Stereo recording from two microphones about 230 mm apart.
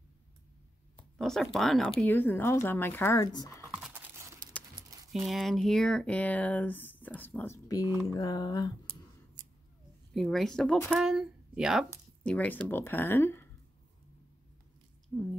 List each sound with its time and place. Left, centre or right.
0.9 s speech: centre
3.7 s a sound: centre
4.6 s speech: centre
10.1 s speech: centre
15.1 s speech: centre